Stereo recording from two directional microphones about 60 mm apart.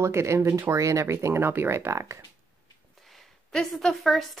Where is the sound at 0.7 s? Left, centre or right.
Right.